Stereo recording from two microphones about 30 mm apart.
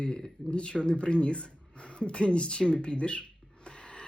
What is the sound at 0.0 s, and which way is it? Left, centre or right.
Speech, left.